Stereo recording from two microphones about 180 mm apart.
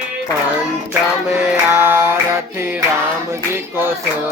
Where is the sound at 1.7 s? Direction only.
15° right (ahead or behind).